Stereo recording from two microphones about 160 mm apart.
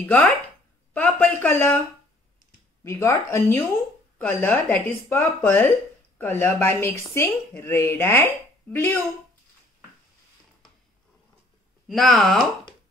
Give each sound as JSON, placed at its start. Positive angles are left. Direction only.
{"t": 0.0, "sound": "speech", "side_deg": 10}
{"t": 2.8, "sound": "speech", "side_deg": 20}
{"t": 11.9, "sound": "speech", "side_deg": 0}